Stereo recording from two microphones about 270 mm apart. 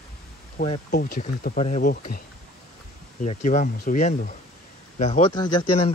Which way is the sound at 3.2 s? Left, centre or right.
Left.